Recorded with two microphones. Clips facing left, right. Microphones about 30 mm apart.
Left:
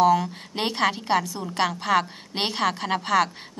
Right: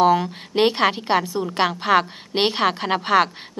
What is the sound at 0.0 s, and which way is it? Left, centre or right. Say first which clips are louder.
A woman's voice: right 2 dB; right.